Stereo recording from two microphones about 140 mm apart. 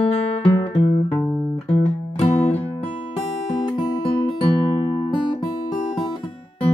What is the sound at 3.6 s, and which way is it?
Music, 35° left (ahead or behind).